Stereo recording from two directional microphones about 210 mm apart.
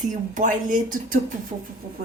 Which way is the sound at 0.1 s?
35° right (ahead or behind).